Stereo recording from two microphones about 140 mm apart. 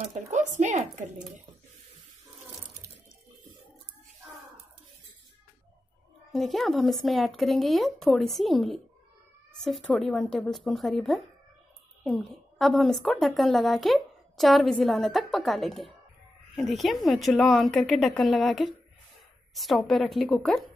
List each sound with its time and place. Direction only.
0.0 s speech: 55° right (ahead or behind)
6.3 s a woman's voice: centre (ahead or behind)